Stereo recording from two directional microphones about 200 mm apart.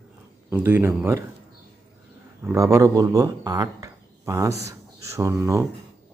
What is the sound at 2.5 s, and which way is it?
Speech, 15° right (ahead or behind).